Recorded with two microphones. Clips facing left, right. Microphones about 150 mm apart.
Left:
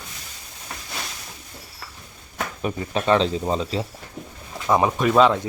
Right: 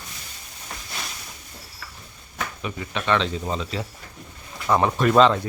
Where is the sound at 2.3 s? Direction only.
40° left (ahead or behind).